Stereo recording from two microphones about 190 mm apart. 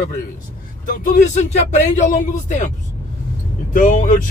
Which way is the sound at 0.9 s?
45° left (ahead or behind).